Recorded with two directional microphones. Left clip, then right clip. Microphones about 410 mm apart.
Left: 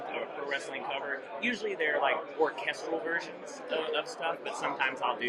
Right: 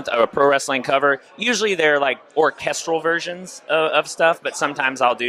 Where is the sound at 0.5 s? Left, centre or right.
Right.